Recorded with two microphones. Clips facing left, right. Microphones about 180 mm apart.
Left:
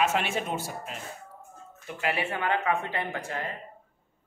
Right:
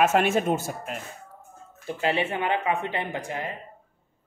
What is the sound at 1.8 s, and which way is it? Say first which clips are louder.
Speech: right 4 dB; 30° right (ahead or behind).